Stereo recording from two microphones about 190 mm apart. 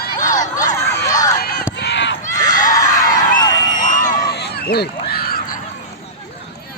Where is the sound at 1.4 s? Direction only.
55° left (ahead or behind).